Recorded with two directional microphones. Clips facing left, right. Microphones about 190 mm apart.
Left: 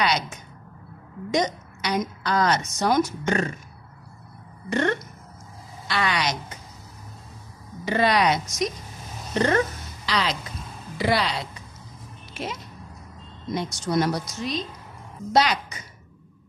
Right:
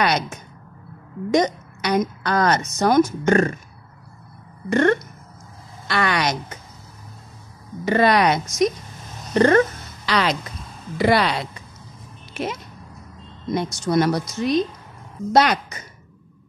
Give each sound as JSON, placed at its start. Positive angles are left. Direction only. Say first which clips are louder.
{"t": 0.0, "sound": "a woman's voice", "louder": "right 3 dB", "side_deg": -55}
{"t": 4.6, "sound": "a woman's voice", "louder": "right 6 dB", "side_deg": -55}
{"t": 7.8, "sound": "speech", "louder": "right 4 dB", "side_deg": -55}
{"t": 13.6, "sound": "a woman's voice", "louder": "right 4 dB", "side_deg": -60}